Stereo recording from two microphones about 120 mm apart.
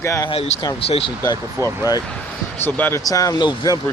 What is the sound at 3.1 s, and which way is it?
Speech, 30° left (ahead or behind).